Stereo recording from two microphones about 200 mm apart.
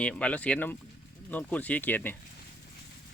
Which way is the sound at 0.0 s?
5° left (ahead or behind).